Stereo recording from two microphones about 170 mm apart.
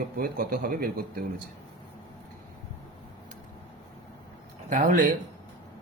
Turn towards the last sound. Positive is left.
turn(degrees=-50)  # may be behind; listen again after turning